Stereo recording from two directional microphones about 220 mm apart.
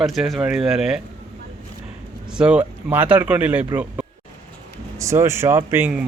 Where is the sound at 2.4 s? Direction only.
5° right (ahead or behind).